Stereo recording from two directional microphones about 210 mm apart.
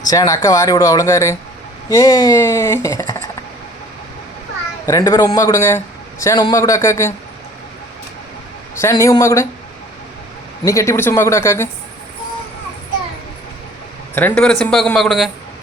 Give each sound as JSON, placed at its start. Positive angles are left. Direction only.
{"t": 0.1, "sound": "speech", "side_deg": 15}
{"t": 4.9, "sound": "speech", "side_deg": 15}
{"t": 8.8, "sound": "speech", "side_deg": 15}
{"t": 10.6, "sound": "speech", "side_deg": 15}
{"t": 14.2, "sound": "a man's voice", "side_deg": 5}